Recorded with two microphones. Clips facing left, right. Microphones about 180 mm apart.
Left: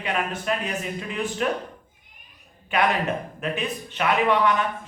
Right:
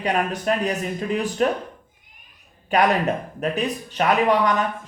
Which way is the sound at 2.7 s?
40° right (ahead or behind).